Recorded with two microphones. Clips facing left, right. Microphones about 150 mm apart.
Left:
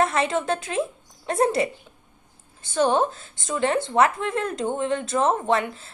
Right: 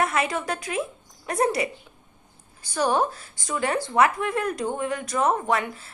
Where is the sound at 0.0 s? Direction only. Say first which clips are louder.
Left 3 dB; 25° left (ahead or behind).